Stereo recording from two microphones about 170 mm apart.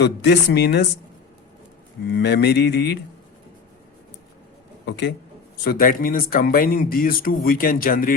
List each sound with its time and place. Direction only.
0.0 s speech: 75° left (ahead or behind)
2.0 s speech: 75° left (ahead or behind)
4.9 s a man's voice: 90° left
5.6 s speech: 55° left (ahead or behind)